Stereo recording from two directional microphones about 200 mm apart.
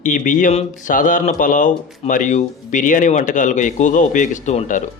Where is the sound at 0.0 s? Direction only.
40° left (ahead or behind).